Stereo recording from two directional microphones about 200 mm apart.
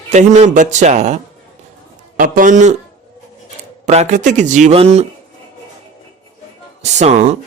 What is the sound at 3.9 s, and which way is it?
Speech, 35° right (ahead or behind).